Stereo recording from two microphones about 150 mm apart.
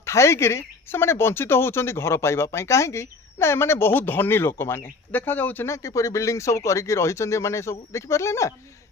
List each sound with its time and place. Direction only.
0.0 s speech: 20° left (ahead or behind)